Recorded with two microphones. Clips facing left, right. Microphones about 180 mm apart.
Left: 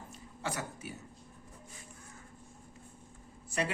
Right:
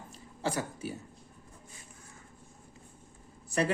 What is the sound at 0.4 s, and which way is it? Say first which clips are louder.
Speech: right 5 dB; 30° right (ahead or behind).